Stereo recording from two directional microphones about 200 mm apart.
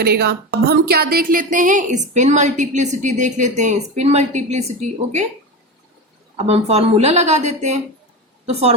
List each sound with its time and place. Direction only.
0.0 s a woman's voice: 55° right (ahead or behind); by 5.2 s 35° right (ahead or behind)
6.3 s a woman's voice: 30° right (ahead or behind)